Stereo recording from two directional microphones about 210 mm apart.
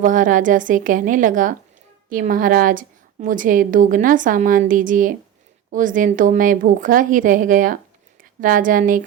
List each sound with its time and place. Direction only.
0.0 s a woman's voice: 40° right (ahead or behind)